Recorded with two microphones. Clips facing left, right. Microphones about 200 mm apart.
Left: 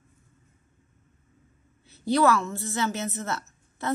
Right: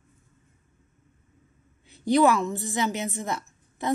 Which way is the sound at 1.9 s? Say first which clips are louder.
Right 2 dB; 15° right (ahead or behind).